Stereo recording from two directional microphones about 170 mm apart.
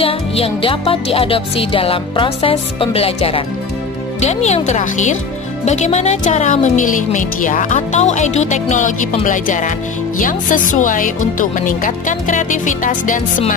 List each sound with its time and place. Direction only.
0.0 s music: 30° left (ahead or behind)
4.2 s speech: 40° left (ahead or behind)